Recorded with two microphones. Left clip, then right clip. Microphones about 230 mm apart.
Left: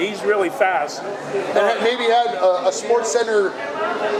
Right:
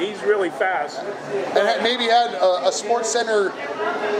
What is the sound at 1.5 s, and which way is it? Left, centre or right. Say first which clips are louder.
A man's voice: left 1 dB; right.